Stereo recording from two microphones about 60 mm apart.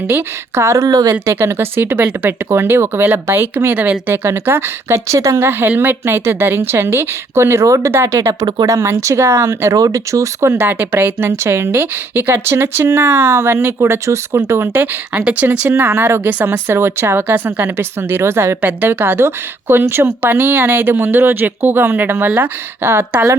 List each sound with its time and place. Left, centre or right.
0.5 s speech: right
0.9 s speech: right
1.2 s speech: right
5.4 s speech: right
9.7 s speech: right
10.7 s speech: right
14.7 s speech: right
15.6 s speech: right
18.6 s speech: right